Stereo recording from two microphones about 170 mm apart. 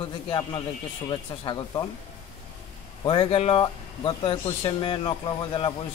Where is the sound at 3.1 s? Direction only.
30° left (ahead or behind).